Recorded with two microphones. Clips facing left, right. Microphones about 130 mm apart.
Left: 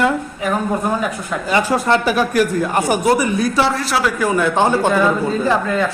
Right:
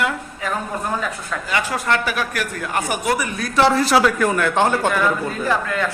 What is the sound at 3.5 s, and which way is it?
Speech, centre (ahead or behind).